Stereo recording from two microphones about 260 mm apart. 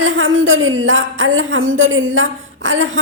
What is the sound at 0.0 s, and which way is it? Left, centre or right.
A woman's voice, right.